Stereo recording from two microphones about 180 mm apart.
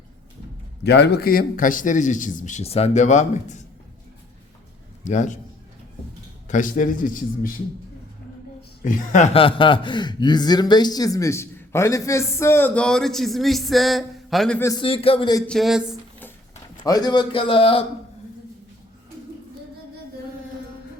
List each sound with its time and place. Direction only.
0.9 s speech: 65° left (ahead or behind); by 3.6 s 40° left (ahead or behind)
5.0 s speech: 45° left (ahead or behind)
6.5 s speech: 45° left (ahead or behind)
8.8 s speech: 45° left (ahead or behind); by 14.6 s centre (ahead or behind)
14.6 s speech: 20° left (ahead or behind)
14.8 s a man's voice: 30° left (ahead or behind)
15.4 s speech: centre (ahead or behind)
16.8 s speech: 20° left (ahead or behind)